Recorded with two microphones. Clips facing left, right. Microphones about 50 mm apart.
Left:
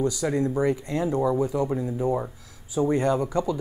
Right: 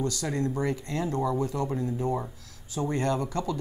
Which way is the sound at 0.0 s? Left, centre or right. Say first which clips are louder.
Left 5 dB; centre.